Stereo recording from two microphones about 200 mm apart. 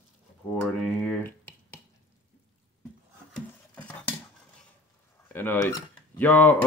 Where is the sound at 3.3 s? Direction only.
5° left (ahead or behind).